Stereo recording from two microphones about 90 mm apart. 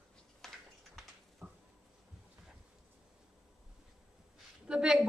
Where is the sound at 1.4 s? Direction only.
20° right (ahead or behind).